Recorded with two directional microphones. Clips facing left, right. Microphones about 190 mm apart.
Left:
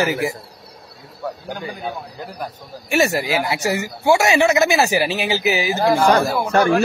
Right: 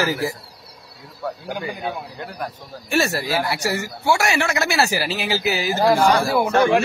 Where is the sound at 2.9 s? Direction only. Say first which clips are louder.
Left 3 dB; 15° left (ahead or behind).